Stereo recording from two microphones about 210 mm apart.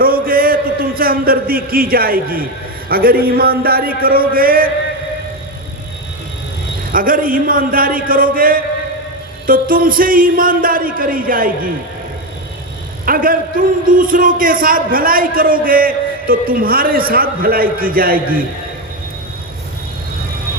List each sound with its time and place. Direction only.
0.0 s a man's voice: 45° right (ahead or behind)
6.9 s speech: 40° right (ahead or behind)
13.1 s a man's voice: 40° right (ahead or behind)